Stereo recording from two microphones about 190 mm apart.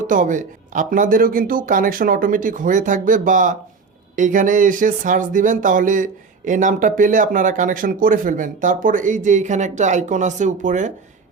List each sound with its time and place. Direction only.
0.1 s speech: 45° right (ahead or behind)